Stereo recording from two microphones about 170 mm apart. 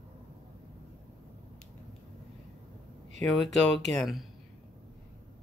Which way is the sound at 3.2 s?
Centre (ahead or behind).